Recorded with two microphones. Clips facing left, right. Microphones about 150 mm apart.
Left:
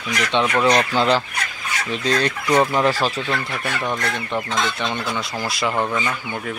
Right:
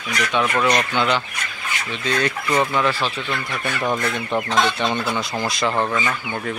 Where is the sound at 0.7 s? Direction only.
35° left (ahead or behind).